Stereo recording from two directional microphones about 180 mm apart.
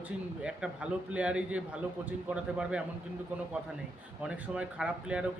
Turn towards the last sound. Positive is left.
turn(degrees=-5)  # may be behind; listen again after turning